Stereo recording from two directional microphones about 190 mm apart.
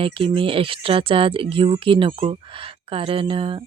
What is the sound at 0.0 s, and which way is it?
Speech, 30° right (ahead or behind).